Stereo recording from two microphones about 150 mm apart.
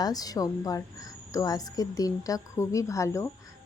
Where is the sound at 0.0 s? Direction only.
25° left (ahead or behind).